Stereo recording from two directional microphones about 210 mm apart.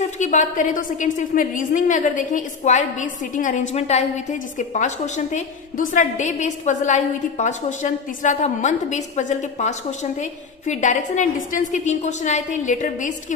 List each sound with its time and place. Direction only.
0.0 s a woman's voice: 35° left (ahead or behind)